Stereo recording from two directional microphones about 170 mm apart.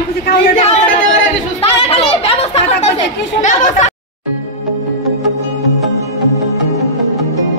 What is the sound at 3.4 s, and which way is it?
Speech, 45° left (ahead or behind).